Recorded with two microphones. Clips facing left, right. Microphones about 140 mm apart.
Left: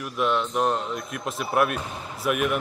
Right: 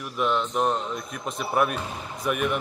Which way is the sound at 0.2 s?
Centre (ahead or behind).